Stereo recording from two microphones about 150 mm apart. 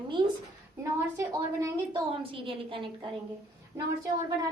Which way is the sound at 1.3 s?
20° right (ahead or behind).